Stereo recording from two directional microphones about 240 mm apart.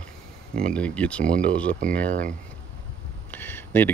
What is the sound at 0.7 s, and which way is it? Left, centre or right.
Speech, centre.